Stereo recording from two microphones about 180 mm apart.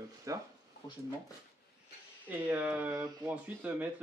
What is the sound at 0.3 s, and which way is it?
Speech, 20° right (ahead or behind).